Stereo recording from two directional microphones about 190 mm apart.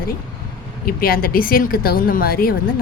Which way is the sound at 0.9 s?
50° left (ahead or behind).